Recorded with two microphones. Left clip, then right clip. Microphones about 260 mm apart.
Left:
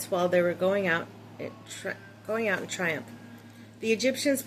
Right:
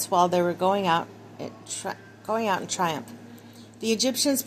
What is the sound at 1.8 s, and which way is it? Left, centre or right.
A woman's voice, right.